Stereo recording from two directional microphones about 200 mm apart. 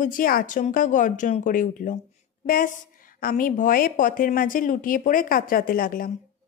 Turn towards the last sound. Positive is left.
turn(degrees=45)  # may be behind; listen again after turning